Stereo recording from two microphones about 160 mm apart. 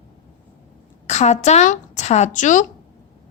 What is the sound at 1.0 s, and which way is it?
A woman's voice, 45° left (ahead or behind).